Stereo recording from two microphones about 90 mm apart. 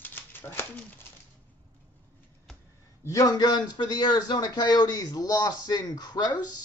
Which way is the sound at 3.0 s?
40° left (ahead or behind).